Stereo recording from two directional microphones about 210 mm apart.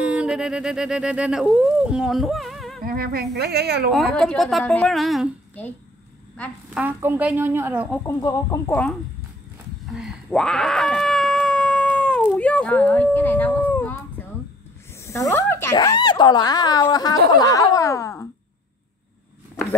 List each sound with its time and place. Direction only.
0.0 s speech: 5° right (ahead or behind)
2.8 s a woman's voice: 45° right (ahead or behind)
3.9 s a woman's voice: centre (ahead or behind)
6.8 s speech: 10° right (ahead or behind)
8.1 s speech: 15° left (ahead or behind)
9.8 s a sound: centre (ahead or behind)
12.4 s howl: 5° left (ahead or behind)
15.0 s speech: 15° left (ahead or behind)
17.3 s a sound: 15° left (ahead or behind)